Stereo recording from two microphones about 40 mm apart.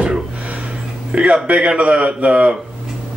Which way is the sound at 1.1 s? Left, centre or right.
Right.